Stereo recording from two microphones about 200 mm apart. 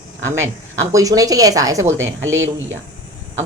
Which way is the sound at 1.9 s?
70° right (ahead or behind).